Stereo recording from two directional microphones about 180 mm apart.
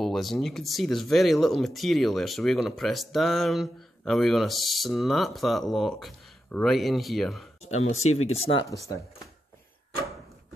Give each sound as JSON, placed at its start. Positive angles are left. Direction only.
{"t": 0.0, "sound": "speech", "side_deg": 0}
{"t": 7.9, "sound": "speech", "side_deg": 35}
{"t": 8.6, "sound": "speech", "side_deg": 20}